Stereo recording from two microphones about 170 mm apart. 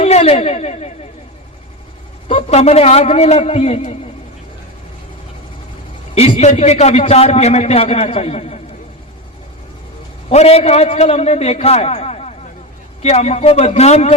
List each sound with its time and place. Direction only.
0.0 s speech: 40° left (ahead or behind)
2.2 s a man's voice: 40° left (ahead or behind)
6.1 s a man's voice: 35° left (ahead or behind)
10.2 s a man's voice: 35° left (ahead or behind)